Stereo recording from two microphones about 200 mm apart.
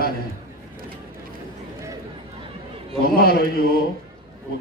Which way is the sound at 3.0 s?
50° left (ahead or behind).